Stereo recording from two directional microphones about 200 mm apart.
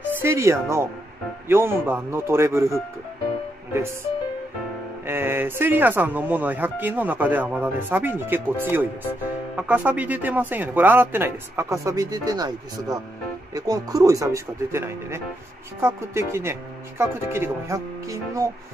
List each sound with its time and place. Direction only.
0.1 s speech: 10° right (ahead or behind)
5.0 s speech: 10° right (ahead or behind)